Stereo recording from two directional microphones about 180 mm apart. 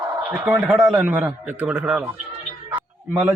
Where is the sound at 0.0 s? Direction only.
10° right (ahead or behind).